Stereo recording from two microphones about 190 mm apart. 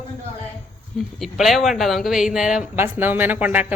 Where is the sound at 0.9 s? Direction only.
Centre (ahead or behind).